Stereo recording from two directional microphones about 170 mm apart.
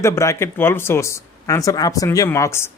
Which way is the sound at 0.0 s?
15° left (ahead or behind).